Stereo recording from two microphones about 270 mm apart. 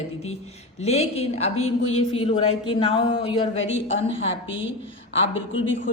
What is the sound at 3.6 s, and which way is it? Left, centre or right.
Speech, left.